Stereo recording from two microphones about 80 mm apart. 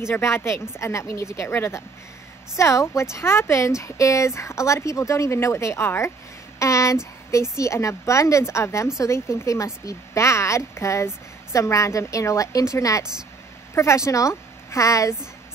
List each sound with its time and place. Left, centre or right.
0.0 s a woman's voice: left